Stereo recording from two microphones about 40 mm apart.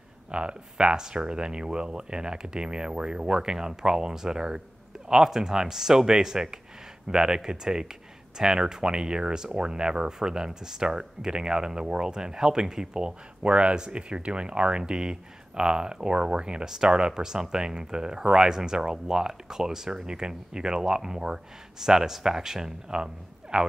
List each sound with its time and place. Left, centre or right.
0.3 s speech: right